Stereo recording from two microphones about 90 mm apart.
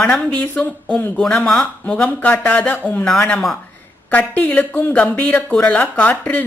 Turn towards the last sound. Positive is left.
turn(degrees=15)  # may be behind; listen again after turning